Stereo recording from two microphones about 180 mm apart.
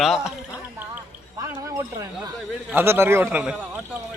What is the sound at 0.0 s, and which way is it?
Speech, centre (ahead or behind).